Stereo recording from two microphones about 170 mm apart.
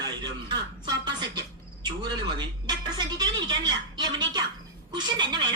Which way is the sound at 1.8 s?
25° right (ahead or behind).